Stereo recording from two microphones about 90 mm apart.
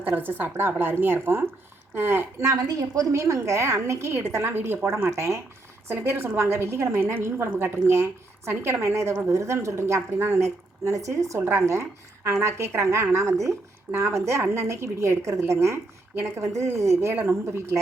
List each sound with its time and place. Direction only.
0.0 s a woman's voice: 20° right (ahead or behind)